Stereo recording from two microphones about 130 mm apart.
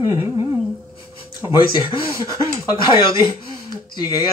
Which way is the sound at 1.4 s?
30° left (ahead or behind).